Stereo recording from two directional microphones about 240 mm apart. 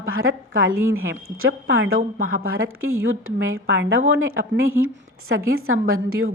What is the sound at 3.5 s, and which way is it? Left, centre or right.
A woman's voice, right.